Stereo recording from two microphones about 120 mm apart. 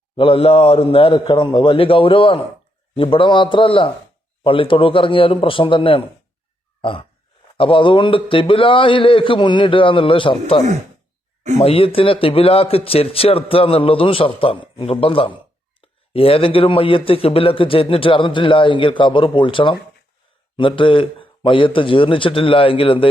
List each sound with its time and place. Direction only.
0.2 s speech: 50° left (ahead or behind)
7.5 s speech: 45° left (ahead or behind)